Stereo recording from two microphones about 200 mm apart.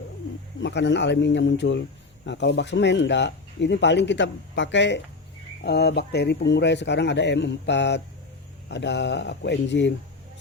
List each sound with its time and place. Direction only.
0.6 s speech: 60° left (ahead or behind)